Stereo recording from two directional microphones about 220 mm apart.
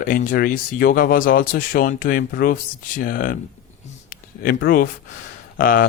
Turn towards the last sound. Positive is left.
turn(degrees=40)  # may be behind; listen again after turning